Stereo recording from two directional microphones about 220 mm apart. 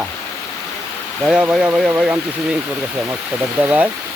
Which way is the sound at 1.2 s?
5° right (ahead or behind).